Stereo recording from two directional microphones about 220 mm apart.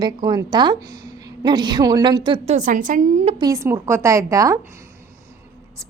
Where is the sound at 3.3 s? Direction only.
15° right (ahead or behind).